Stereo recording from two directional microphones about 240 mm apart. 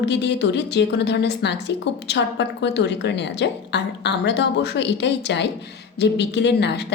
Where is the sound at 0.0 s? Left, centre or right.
Left.